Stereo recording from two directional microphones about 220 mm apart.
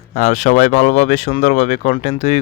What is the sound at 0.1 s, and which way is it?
Speech, 30° left (ahead or behind).